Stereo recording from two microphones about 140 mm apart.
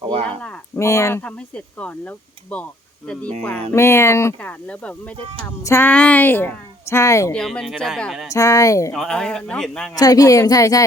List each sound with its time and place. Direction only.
0.0 s a sound: 40° right (ahead or behind)
0.8 s speech: 20° left (ahead or behind)
1.2 s a woman's voice: 10° left (ahead or behind)
3.7 s speech: 20° left (ahead or behind)
4.6 s a woman's voice: 10° left (ahead or behind)
7.3 s a man's voice: 5° left (ahead or behind)
8.3 s speech: 20° left (ahead or behind)
8.9 s a man's voice: centre (ahead or behind)
9.9 s speech: 25° left (ahead or behind)